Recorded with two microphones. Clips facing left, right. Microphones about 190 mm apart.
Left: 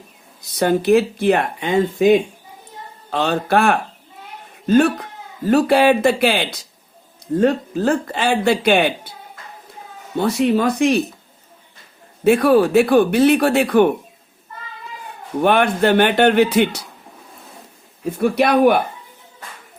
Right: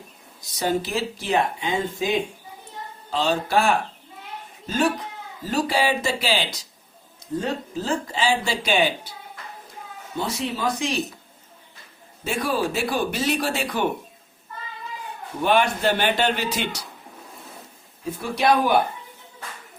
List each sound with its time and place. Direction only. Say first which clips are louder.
0.5 s speech: left 10 dB; 60° left (ahead or behind)
10.2 s speech: left 11 dB; 60° left (ahead or behind)
12.2 s speech: left 12 dB; 60° left (ahead or behind)
15.4 s speech: left 5 dB; 55° left (ahead or behind)
18.2 s speech: left 6 dB; 60° left (ahead or behind)